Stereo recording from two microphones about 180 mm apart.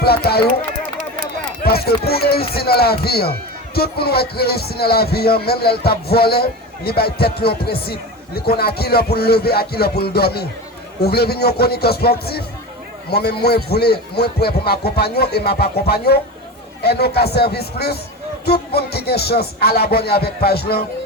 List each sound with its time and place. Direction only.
0.0 s a man's voice: 60° left (ahead or behind)
1.6 s a man's voice: 60° left (ahead or behind)